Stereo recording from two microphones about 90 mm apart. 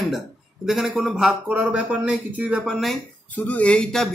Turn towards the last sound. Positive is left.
turn(degrees=5)  # may be behind; listen again after turning